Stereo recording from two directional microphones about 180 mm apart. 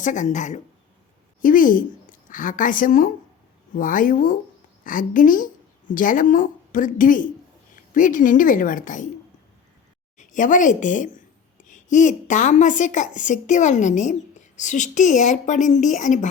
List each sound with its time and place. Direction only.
0.0 s a woman's voice: 45° left (ahead or behind)
10.2 s a woman's voice: 45° left (ahead or behind)